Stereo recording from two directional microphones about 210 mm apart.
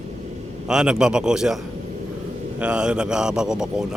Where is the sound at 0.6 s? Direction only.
5° right (ahead or behind).